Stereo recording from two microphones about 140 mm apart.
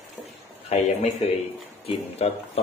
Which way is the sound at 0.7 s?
50° left (ahead or behind).